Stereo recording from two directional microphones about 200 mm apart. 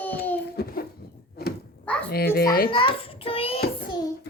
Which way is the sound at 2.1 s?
50° left (ahead or behind).